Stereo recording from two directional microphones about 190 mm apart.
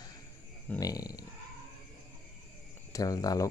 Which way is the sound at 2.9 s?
20° left (ahead or behind).